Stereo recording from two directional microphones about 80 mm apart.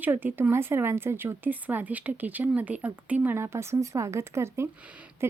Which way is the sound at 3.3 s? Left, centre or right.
Right.